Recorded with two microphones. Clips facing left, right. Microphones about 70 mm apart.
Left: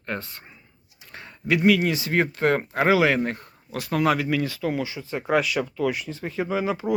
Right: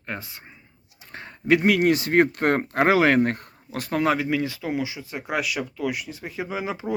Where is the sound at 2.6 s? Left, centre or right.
Right.